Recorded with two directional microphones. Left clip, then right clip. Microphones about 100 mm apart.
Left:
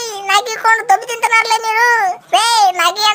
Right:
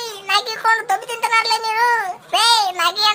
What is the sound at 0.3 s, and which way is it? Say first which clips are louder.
A child's voice: left 4 dB; 45° left (ahead or behind).